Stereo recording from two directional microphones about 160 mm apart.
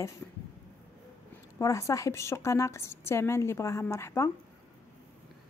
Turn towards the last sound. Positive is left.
turn(degrees=15)  # may be behind; listen again after turning